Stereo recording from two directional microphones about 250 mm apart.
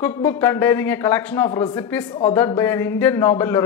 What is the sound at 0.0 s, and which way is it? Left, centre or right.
A man's voice, centre.